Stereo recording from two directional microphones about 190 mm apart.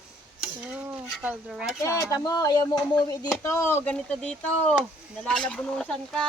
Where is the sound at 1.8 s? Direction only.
15° left (ahead or behind).